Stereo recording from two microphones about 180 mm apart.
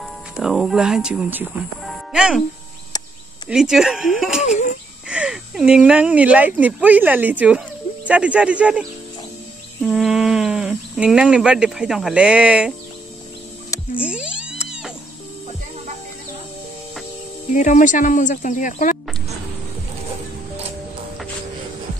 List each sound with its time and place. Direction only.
0.0 s speech: centre (ahead or behind)
3.4 s speech: 5° right (ahead or behind)
9.8 s speech: centre (ahead or behind)
13.9 s music: 5° right (ahead or behind)
17.5 s speech: 45° left (ahead or behind)